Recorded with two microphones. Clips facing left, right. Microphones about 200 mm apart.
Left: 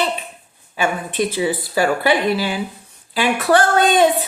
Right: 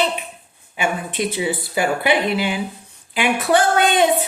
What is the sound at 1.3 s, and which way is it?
Speech, 20° right (ahead or behind).